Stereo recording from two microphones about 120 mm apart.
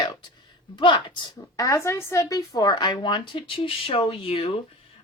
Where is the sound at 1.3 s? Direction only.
25° left (ahead or behind).